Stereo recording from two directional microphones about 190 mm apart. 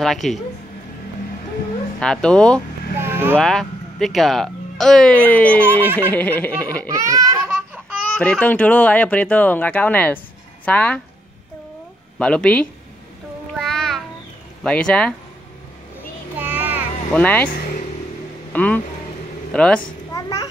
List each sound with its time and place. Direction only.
0.0 s speech: centre (ahead or behind)
2.0 s speech: 5° left (ahead or behind)
3.0 s vehicle: 10° right (ahead or behind)
3.3 s speech: 5° left (ahead or behind)
6.9 s a sound: 15° right (ahead or behind)
8.2 s speech: 10° left (ahead or behind)
12.2 s speech: 5° left (ahead or behind)
13.6 s child singing: centre (ahead or behind)
14.6 s speech: 5° left (ahead or behind)
16.3 s child singing: 10° right (ahead or behind)
17.1 s speech: 10° left (ahead or behind)
18.5 s speech: 10° left (ahead or behind)
19.8 s a sound: 20° left (ahead or behind)